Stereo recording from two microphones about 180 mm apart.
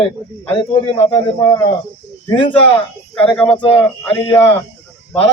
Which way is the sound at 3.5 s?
25° left (ahead or behind).